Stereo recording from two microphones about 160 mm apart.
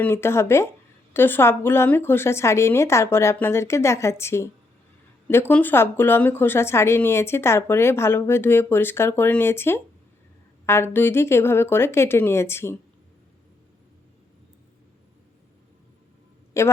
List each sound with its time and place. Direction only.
0.0 s speech: 15° left (ahead or behind)
16.6 s speech: 20° left (ahead or behind)